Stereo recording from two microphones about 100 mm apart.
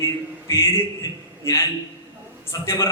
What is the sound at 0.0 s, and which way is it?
A man's voice, 30° left (ahead or behind).